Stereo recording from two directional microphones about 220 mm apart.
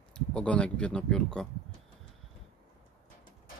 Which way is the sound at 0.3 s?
5° left (ahead or behind).